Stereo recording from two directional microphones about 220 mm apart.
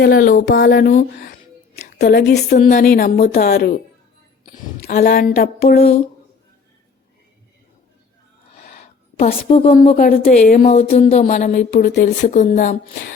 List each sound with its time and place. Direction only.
0.0 s speech: 40° left (ahead or behind)
0.9 s speech: 35° left (ahead or behind)
2.0 s speech: 45° left (ahead or behind)
5.7 s speech: 30° left (ahead or behind)
8.5 s a sound: 40° left (ahead or behind)
9.4 s speech: 25° left (ahead or behind)
10.1 s speech: 40° left (ahead or behind)
11.5 s speech: 50° left (ahead or behind)
12.3 s speech: 35° left (ahead or behind)